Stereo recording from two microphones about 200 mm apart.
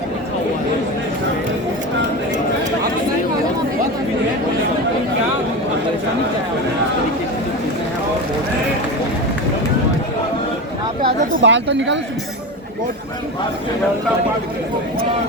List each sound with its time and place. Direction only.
11.4 s speech: 65° right (ahead or behind)